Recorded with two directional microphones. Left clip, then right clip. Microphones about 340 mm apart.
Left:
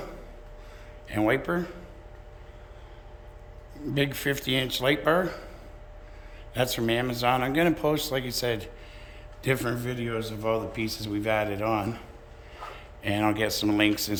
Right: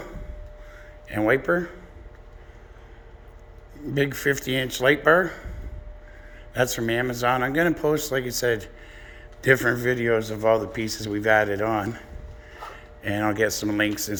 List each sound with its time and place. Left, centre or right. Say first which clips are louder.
1.0 s speech: right 4 dB; centre
3.8 s speech: right 4 dB; centre
6.5 s speech: right 3 dB; centre
10.6 s speech: right 3 dB; centre